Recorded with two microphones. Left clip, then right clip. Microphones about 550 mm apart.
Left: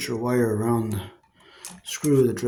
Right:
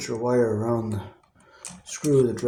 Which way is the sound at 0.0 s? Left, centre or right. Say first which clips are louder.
Right 1 dB; left.